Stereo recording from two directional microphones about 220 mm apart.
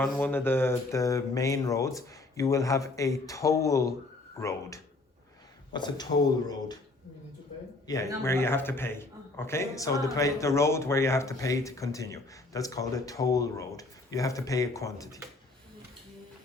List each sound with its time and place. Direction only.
0.0 s a man's voice: 10° left (ahead or behind)
7.9 s a man's voice: 15° left (ahead or behind)